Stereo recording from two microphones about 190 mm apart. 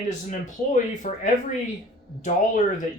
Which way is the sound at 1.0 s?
40° left (ahead or behind).